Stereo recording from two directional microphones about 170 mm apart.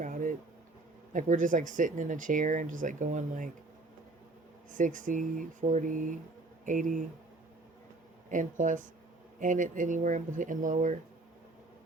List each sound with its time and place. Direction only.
0.0 s bee: 50° right (ahead or behind)
1.1 s speech: 50° right (ahead or behind)
4.7 s speech: 50° right (ahead or behind)
8.3 s speech: 50° right (ahead or behind)